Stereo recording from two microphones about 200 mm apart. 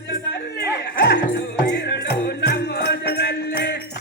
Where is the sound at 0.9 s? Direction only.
50° left (ahead or behind).